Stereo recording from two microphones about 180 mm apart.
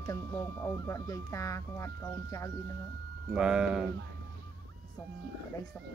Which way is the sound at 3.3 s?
5° right (ahead or behind).